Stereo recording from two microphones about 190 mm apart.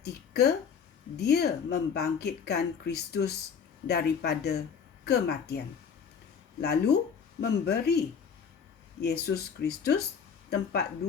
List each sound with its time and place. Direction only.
0.0 s a woman's voice: 60° left (ahead or behind)